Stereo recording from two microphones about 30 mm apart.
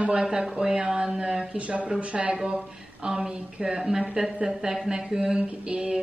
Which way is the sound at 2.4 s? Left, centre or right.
Right.